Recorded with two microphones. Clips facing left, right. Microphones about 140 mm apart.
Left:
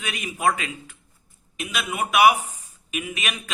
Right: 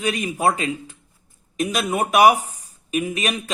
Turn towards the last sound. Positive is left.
turn(degrees=-35)  # may be behind; listen again after turning